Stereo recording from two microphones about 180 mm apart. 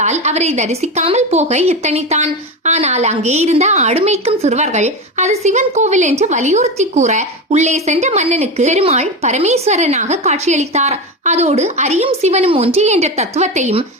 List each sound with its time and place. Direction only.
0.0 s a woman's voice: 40° right (ahead or behind)